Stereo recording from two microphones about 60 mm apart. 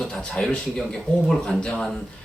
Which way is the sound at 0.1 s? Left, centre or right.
Centre.